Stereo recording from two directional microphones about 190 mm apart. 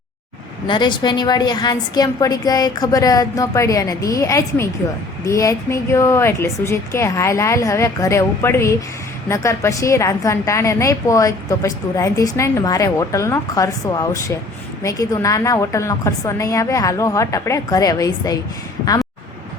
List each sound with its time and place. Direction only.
0.7 s a woman's voice: 25° left (ahead or behind)